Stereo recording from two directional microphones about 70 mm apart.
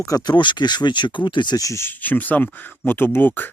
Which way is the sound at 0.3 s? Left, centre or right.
Left.